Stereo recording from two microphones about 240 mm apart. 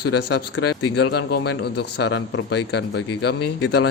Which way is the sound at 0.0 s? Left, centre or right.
Left.